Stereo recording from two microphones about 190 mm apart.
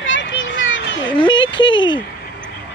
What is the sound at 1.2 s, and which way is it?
Speech, 25° left (ahead or behind).